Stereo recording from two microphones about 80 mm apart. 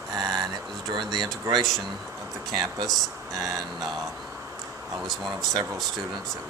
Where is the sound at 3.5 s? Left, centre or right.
Centre.